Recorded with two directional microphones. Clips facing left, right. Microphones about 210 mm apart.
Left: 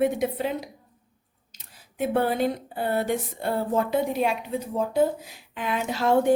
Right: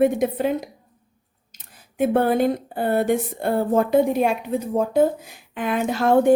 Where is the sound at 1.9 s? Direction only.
50° right (ahead or behind).